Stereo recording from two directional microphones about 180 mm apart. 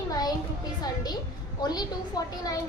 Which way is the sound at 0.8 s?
20° left (ahead or behind).